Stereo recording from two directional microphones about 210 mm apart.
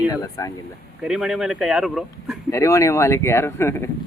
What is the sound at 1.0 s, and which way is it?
Speech, centre (ahead or behind).